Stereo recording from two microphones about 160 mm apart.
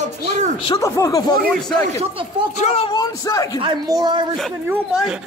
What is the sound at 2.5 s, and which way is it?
Speech, 45° left (ahead or behind).